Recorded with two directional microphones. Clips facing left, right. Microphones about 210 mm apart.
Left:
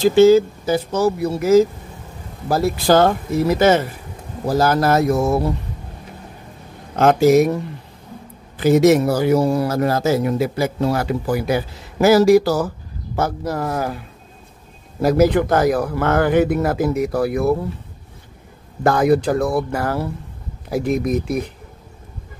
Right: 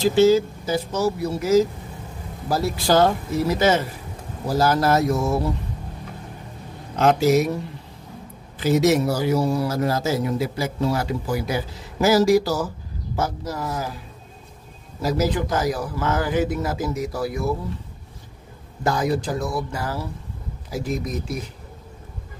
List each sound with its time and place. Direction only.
0.0 s speech: 55° left (ahead or behind)
7.0 s speech: 50° left (ahead or behind)
8.5 s speech: 55° left (ahead or behind)
18.9 s speech: 60° left (ahead or behind)